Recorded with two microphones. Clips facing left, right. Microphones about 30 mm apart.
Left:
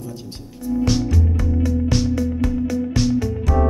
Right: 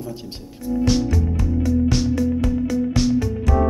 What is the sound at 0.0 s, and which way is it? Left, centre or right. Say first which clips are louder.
Speech: right 1 dB; right.